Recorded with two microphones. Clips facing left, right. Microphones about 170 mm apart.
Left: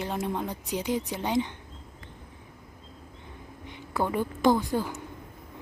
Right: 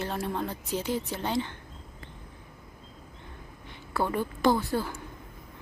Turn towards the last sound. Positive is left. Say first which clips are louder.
# left 1 dB
turn(degrees=15)  # may be behind; listen again after turning